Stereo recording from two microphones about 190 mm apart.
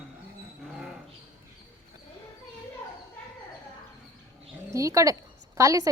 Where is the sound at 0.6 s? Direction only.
5° right (ahead or behind).